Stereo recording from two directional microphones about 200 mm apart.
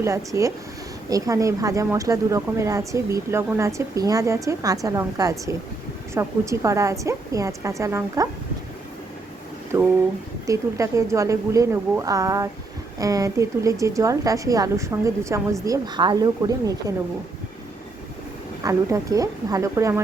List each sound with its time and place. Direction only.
0.3 s a woman's voice: 15° right (ahead or behind)
9.7 s a woman's voice: 10° right (ahead or behind)
18.6 s a woman's voice: 15° right (ahead or behind)